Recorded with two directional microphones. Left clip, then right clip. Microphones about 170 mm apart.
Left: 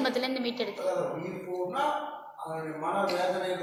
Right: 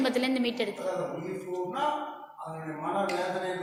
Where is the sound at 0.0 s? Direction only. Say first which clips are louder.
Right 1 dB; 40° right (ahead or behind).